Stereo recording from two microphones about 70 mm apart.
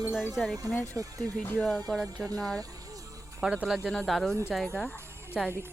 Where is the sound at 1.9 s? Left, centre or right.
Centre.